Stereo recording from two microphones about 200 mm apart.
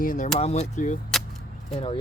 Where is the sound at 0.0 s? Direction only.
45° left (ahead or behind).